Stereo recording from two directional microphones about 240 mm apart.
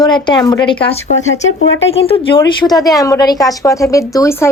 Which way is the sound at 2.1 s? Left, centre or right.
Left.